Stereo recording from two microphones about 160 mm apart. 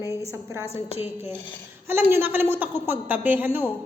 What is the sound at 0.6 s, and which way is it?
Speech, 40° left (ahead or behind).